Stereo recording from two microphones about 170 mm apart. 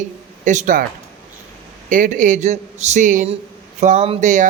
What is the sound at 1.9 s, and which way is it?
A man's voice, 50° right (ahead or behind).